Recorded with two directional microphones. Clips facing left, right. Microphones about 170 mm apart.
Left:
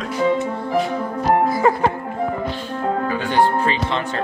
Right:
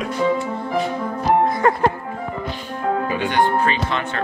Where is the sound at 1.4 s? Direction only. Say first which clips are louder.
Left 1 dB; 5° left (ahead or behind).